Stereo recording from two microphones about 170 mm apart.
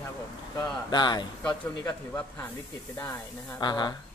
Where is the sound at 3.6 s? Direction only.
25° left (ahead or behind).